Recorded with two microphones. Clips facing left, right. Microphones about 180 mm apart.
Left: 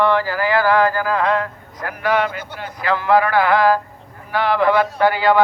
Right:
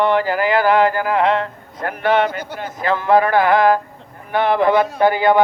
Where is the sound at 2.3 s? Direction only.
40° right (ahead or behind).